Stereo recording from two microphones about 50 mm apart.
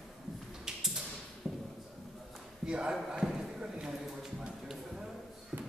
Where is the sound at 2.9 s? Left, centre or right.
Centre.